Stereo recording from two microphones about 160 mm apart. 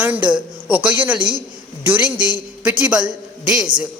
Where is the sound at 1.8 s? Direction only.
10° right (ahead or behind).